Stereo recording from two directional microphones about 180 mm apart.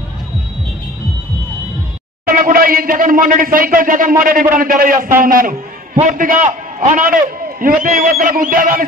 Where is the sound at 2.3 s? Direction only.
50° right (ahead or behind).